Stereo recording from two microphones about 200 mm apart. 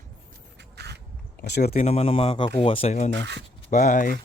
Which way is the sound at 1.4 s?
50° left (ahead or behind).